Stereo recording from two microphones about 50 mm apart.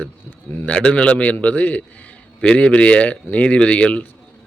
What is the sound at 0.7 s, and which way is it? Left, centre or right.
Speech, left.